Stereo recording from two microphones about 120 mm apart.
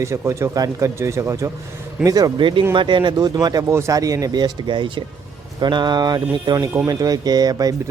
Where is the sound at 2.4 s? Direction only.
45° right (ahead or behind).